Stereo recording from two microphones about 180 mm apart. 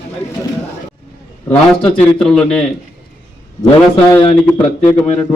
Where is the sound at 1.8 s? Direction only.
35° left (ahead or behind).